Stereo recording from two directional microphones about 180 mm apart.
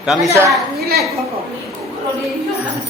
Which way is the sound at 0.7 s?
60° right (ahead or behind).